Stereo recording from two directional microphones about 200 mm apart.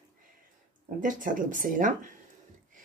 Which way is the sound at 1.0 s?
40° right (ahead or behind).